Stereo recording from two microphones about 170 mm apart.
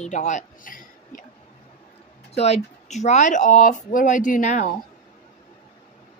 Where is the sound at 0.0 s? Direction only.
45° left (ahead or behind).